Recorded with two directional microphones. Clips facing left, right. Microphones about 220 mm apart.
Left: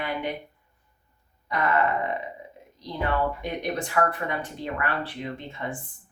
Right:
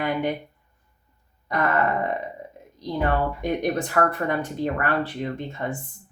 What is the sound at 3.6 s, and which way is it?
Speech, 45° right (ahead or behind).